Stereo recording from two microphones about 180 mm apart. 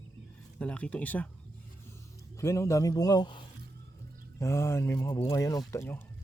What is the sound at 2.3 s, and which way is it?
A man's voice, 15° left (ahead or behind).